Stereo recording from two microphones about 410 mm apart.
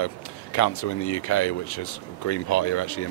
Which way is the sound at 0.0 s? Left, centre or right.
Left.